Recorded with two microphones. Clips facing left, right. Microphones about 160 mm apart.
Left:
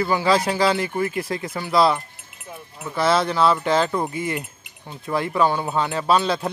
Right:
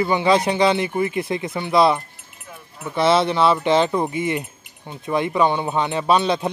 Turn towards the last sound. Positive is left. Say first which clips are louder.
# right 2 dB
turn(degrees=-20)  # may be behind; listen again after turning